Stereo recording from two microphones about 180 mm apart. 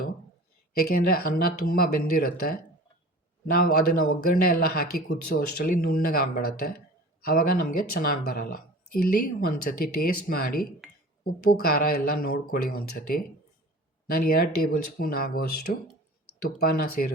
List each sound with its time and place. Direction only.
0.9 s speech: 55° left (ahead or behind)
9.6 s speech: 55° left (ahead or behind)